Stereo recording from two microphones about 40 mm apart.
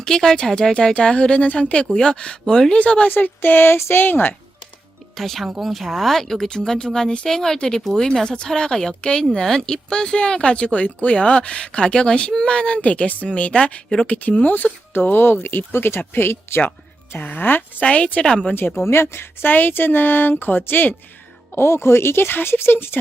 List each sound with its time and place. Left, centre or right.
0.0 s speech: centre
2.7 s a woman's voice: left
3.1 s speech: left
5.1 s speech: centre
6.7 s a woman's voice: left
14.1 s speech: left
17.2 s speech: left
17.7 s a woman's voice: left
18.9 s speech: left
21.5 s speech: left